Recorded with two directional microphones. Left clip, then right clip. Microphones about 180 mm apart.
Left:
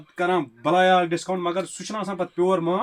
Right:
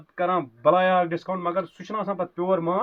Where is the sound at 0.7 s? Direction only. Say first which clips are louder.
Left 3 dB; 15° right (ahead or behind).